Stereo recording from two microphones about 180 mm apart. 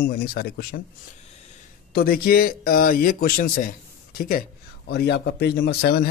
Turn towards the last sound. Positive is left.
turn(degrees=60)  # may be behind; listen again after turning